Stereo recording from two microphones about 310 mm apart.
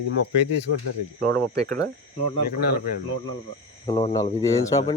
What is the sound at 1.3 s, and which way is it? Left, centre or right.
Speech, centre.